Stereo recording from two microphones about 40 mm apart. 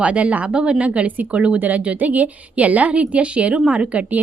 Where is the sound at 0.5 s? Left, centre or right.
Right.